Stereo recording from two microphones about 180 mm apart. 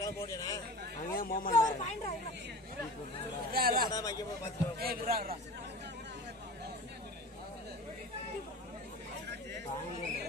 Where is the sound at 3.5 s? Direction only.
55° right (ahead or behind).